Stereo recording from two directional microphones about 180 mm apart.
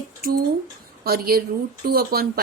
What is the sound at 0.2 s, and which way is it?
A woman's voice, 60° right (ahead or behind).